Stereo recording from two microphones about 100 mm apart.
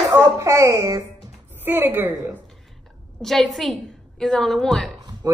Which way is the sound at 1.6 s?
20° right (ahead or behind).